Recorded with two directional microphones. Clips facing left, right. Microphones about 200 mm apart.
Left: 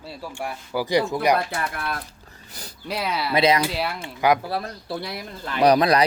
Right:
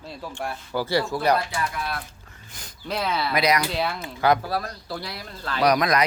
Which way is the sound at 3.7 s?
5° left (ahead or behind).